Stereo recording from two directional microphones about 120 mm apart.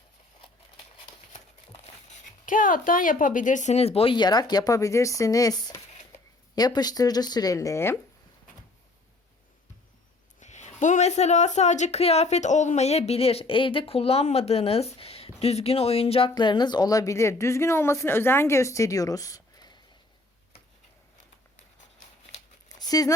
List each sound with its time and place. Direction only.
2.5 s speech: 90° left; by 7.9 s 25° left (ahead or behind)
10.4 s speech: 80° left; by 16.3 s 55° left (ahead or behind)
16.3 s speech: 35° left (ahead or behind)
22.8 s speech: 30° left (ahead or behind)